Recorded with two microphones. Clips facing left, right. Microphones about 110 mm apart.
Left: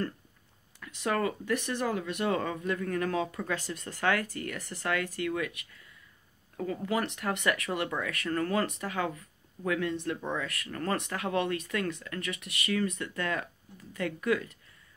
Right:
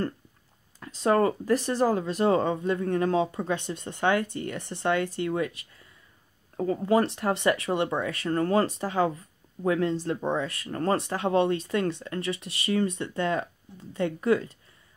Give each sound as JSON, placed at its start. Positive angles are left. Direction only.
{"t": 0.7, "sound": "speech", "side_deg": -30}